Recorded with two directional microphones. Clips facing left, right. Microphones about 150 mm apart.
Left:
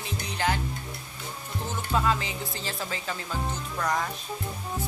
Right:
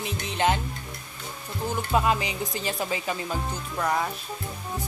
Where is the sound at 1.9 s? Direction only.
15° right (ahead or behind).